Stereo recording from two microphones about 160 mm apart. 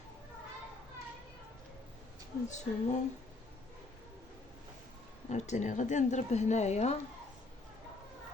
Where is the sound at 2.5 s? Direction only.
45° left (ahead or behind).